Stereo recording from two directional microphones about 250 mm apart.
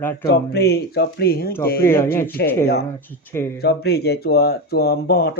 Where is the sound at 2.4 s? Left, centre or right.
Left.